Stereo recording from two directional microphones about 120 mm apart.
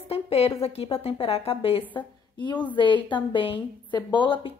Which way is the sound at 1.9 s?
40° left (ahead or behind).